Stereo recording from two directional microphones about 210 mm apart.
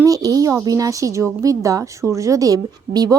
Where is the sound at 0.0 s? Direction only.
15° right (ahead or behind).